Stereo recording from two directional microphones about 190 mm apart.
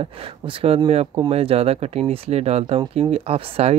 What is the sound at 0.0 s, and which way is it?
Speech, 30° right (ahead or behind).